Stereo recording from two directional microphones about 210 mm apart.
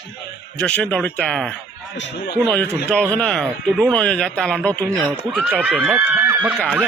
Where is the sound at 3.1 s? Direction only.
5° left (ahead or behind).